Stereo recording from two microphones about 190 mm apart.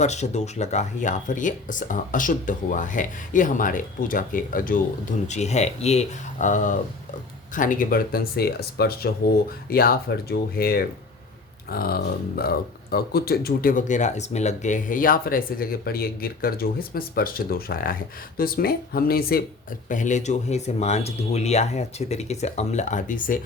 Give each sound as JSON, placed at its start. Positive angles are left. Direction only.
{"t": 0.0, "sound": "speech", "side_deg": 35}
{"t": 5.3, "sound": "speech", "side_deg": 35}
{"t": 19.9, "sound": "speech", "side_deg": 40}